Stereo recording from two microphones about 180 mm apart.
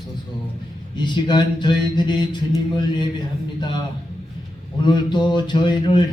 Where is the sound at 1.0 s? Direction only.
25° left (ahead or behind).